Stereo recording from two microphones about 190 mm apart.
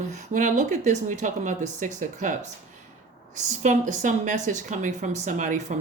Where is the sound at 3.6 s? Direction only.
40° right (ahead or behind).